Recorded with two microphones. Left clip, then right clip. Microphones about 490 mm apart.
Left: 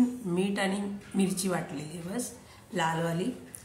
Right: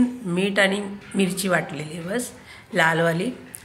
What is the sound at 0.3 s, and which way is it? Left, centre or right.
A woman's voice, left.